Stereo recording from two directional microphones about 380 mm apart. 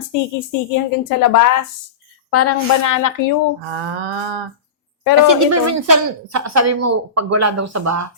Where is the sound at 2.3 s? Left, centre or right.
Left.